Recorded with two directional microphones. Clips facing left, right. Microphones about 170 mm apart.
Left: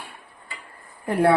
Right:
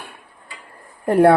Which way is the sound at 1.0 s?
55° right (ahead or behind).